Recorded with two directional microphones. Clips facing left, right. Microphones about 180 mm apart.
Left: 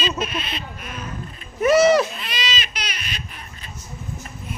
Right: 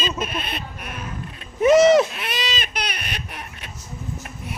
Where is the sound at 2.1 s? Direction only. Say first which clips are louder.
Right 2 dB; 60° right (ahead or behind).